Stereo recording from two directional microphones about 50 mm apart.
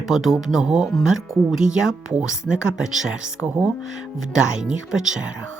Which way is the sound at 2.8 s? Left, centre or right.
Centre.